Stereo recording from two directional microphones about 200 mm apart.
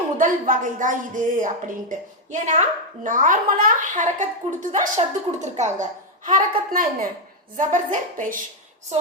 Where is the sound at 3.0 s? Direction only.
40° right (ahead or behind).